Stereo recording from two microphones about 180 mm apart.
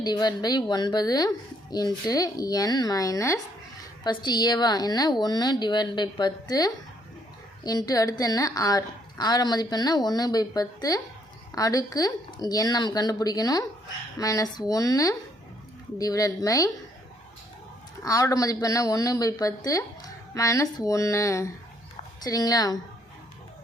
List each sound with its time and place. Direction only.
0.0 s a woman's voice: 25° left (ahead or behind)
18.0 s a woman's voice: 20° left (ahead or behind)